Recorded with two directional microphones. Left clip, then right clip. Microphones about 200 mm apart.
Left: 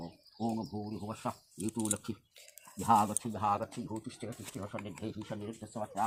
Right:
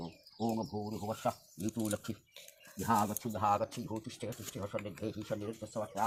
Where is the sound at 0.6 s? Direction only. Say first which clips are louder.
Right 2 dB; 20° right (ahead or behind).